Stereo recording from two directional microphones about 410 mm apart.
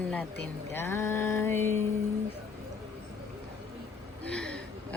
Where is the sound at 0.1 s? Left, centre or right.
Centre.